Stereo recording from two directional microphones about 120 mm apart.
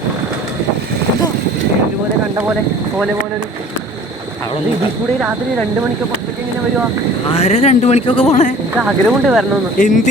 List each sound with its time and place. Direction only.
7.3 s speech: 60° left (ahead or behind)
8.8 s speech: 5° right (ahead or behind)
9.7 s speech: 90° left